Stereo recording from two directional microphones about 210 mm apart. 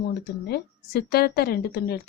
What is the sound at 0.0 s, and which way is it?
A woman's voice, 50° left (ahead or behind).